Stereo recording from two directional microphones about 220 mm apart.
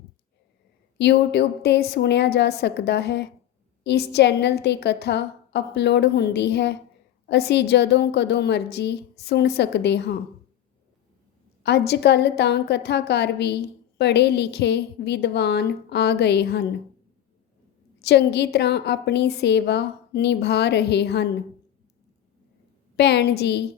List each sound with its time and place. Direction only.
0.9 s a woman's voice: 50° left (ahead or behind)
11.6 s a woman's voice: 50° left (ahead or behind)
18.0 s a woman's voice: 50° left (ahead or behind)
23.0 s a woman's voice: 50° left (ahead or behind)